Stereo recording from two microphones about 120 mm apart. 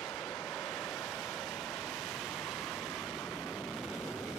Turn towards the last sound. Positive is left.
turn(degrees=0)  # may be behind; listen again after turning